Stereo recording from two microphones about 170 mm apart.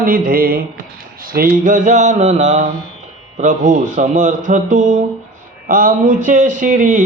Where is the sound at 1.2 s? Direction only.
55° right (ahead or behind).